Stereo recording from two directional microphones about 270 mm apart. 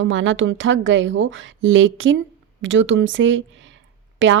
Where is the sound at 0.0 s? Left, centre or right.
Right.